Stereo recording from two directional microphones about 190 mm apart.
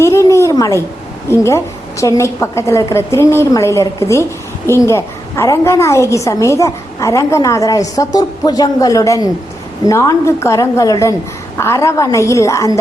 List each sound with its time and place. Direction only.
0.0 s a woman's voice: 15° left (ahead or behind)